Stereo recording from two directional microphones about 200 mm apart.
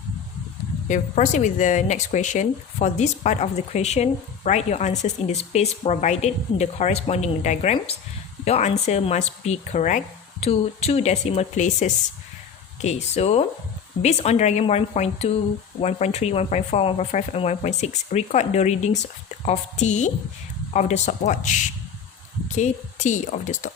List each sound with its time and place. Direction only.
0.9 s speech: 40° left (ahead or behind)